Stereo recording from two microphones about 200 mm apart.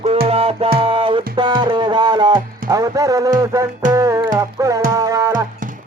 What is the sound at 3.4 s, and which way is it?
Speech, 15° right (ahead or behind).